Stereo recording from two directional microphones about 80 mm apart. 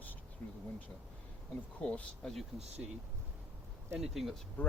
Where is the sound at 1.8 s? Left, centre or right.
Centre.